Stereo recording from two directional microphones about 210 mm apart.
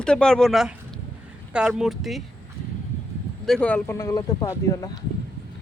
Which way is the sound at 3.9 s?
15° left (ahead or behind).